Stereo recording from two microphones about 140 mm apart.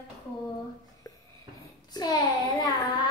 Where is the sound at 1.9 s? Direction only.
30° left (ahead or behind).